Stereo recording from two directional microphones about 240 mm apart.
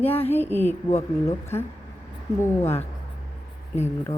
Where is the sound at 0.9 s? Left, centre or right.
Left.